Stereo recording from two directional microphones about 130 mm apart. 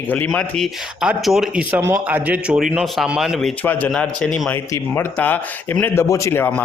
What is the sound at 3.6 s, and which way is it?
Speech, 15° left (ahead or behind).